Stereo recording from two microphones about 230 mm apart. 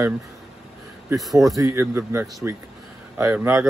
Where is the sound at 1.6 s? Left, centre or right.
Centre.